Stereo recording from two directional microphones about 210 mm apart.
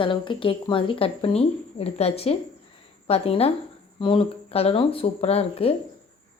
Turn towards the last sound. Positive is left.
turn(degrees=30)  # may be behind; listen again after turning